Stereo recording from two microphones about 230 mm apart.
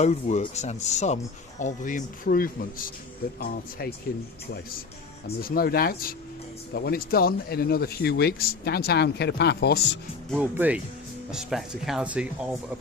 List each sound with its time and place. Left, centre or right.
0.0 s speech: left
5.4 s speech: left
10.2 s speech: centre